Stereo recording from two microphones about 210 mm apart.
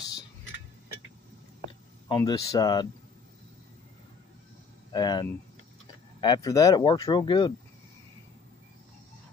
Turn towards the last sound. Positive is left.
turn(degrees=20)  # may be behind; listen again after turning